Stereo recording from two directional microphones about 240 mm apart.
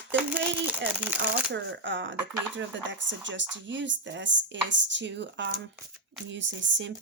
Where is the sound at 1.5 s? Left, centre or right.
Right.